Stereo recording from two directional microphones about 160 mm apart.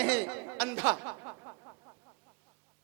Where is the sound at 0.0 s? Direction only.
10° right (ahead or behind).